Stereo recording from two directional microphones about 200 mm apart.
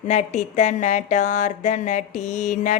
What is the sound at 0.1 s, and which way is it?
Speech, 35° left (ahead or behind).